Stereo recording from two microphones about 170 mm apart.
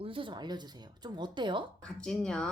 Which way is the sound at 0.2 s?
25° right (ahead or behind).